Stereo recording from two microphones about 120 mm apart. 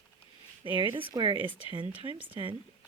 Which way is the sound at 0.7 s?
45° right (ahead or behind).